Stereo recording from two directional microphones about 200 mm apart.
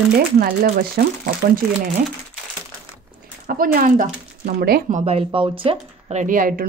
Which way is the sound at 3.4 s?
45° right (ahead or behind).